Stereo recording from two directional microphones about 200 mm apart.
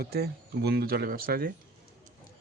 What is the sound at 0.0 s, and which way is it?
Speech, 50° right (ahead or behind).